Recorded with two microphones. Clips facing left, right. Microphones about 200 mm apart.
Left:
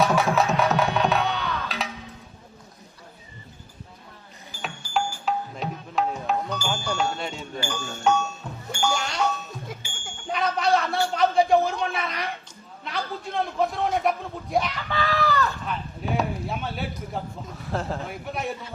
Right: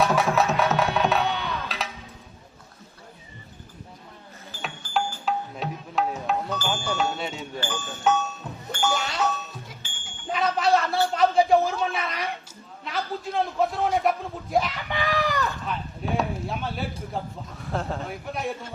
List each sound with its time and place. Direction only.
0.0 s music: centre (ahead or behind)
5.2 s music: centre (ahead or behind)
8.4 s bicycle bell: 5° right (ahead or behind)
8.8 s music: centre (ahead or behind)
9.9 s music: 45° left (ahead or behind)
10.2 s a sound: centre (ahead or behind)
14.8 s fowl: 15° right (ahead or behind)
15.6 s a sound: centre (ahead or behind)